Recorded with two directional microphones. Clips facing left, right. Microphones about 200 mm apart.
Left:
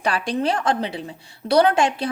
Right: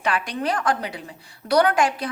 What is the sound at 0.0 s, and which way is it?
A woman's voice, 30° left (ahead or behind).